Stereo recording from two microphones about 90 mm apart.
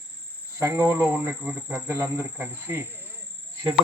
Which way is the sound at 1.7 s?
30° right (ahead or behind).